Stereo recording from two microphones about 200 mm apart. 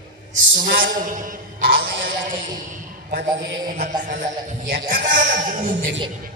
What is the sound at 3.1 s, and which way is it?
Speech, 50° right (ahead or behind).